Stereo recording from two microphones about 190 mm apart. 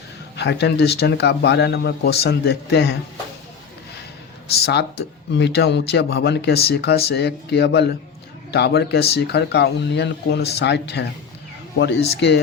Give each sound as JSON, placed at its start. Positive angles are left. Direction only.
{"t": 0.3, "sound": "speech", "side_deg": 60}
{"t": 4.5, "sound": "speech", "side_deg": 60}